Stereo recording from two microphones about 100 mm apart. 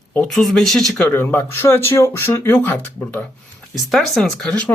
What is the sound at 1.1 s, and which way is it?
Speech, 20° left (ahead or behind).